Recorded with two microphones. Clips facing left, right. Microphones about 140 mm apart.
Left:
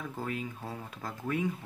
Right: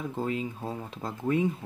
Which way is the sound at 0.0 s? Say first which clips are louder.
Right 5 dB; 25° right (ahead or behind).